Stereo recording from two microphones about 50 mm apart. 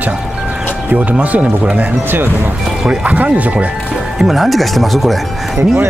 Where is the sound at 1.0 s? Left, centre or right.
Right.